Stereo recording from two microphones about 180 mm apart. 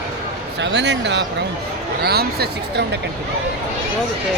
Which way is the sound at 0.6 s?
75° right (ahead or behind).